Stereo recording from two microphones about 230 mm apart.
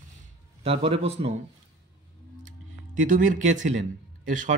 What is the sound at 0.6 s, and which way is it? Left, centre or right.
Speech, right.